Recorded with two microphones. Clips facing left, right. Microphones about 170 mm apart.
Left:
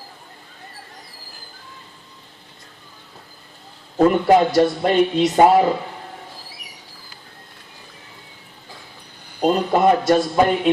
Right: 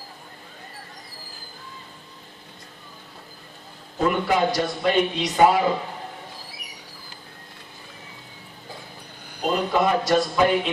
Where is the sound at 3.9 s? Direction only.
50° left (ahead or behind).